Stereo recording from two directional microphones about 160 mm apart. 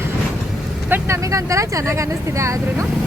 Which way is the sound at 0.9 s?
20° right (ahead or behind).